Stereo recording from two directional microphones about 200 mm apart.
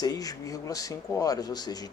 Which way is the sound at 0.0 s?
20° left (ahead or behind).